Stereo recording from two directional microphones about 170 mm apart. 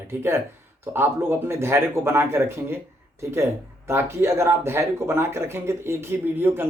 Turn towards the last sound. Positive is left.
turn(degrees=-10)  # may be behind; listen again after turning